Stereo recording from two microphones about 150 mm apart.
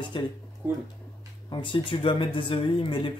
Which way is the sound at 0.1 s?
35° left (ahead or behind).